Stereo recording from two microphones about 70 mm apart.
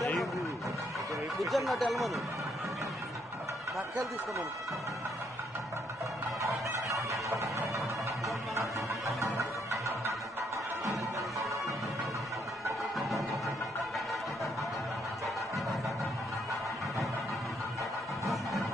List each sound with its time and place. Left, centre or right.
1.4 s speech: centre
6.4 s fowl: right
9.2 s music: right